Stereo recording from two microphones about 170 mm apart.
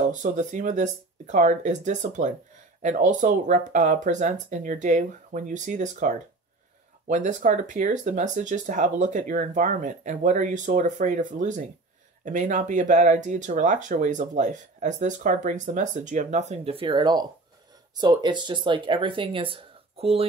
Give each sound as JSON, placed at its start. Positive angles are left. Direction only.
{"t": 0.0, "sound": "speech", "side_deg": -45}